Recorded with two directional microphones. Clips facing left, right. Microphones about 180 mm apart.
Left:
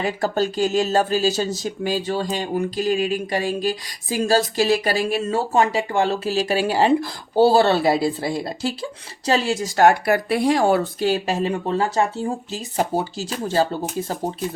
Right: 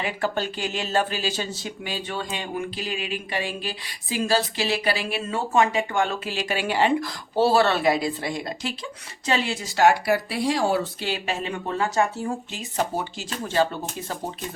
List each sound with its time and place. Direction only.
0.0 s speech: 40° left (ahead or behind)